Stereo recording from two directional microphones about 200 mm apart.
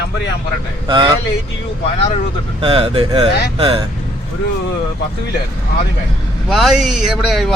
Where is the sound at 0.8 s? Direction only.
25° right (ahead or behind).